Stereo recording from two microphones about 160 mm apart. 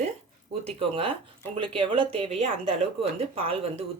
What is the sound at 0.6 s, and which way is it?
Speech, 35° right (ahead or behind).